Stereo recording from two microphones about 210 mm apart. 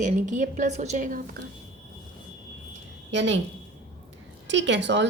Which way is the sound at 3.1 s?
60° right (ahead or behind).